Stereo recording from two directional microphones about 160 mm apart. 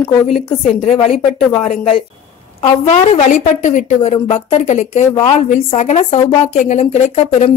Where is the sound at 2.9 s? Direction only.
45° left (ahead or behind).